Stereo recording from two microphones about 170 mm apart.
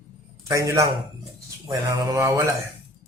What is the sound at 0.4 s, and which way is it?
A man's voice, 20° right (ahead or behind).